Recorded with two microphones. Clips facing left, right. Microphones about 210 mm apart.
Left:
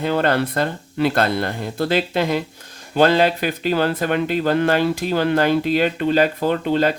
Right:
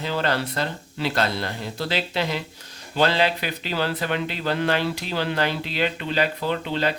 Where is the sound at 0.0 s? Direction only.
55° left (ahead or behind).